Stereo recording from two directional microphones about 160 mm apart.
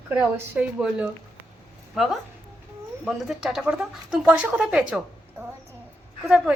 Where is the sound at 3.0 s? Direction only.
5° right (ahead or behind).